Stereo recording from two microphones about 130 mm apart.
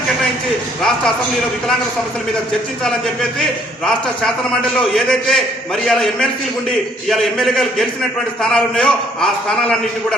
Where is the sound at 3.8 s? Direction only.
5° left (ahead or behind).